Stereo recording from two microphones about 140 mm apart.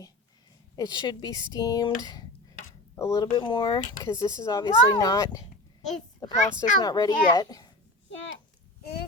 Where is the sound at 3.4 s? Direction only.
35° left (ahead or behind).